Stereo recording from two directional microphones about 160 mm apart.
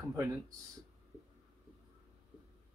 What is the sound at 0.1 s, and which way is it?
Speech, 20° right (ahead or behind).